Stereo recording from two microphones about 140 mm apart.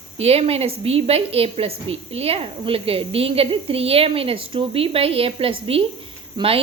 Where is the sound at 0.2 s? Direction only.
45° right (ahead or behind).